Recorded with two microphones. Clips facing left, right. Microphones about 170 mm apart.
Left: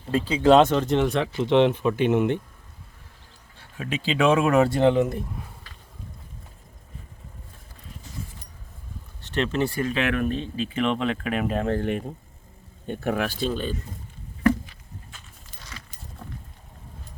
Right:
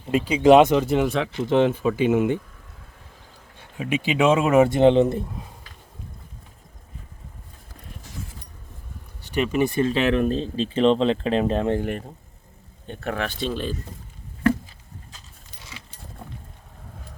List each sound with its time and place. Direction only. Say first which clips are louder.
0.1 s speech: right 3 dB; 15° right (ahead or behind)
3.6 s speech: right 4 dB; 15° right (ahead or behind)
9.2 s speech: right 3 dB; 10° right (ahead or behind)
11.8 s speech: left 1 dB; centre (ahead or behind)